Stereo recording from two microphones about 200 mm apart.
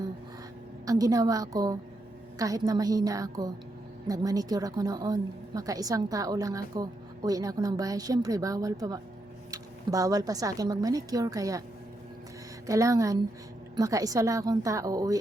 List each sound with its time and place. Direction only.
0.9 s a woman's voice: 15° right (ahead or behind)
12.6 s a woman's voice: 15° right (ahead or behind)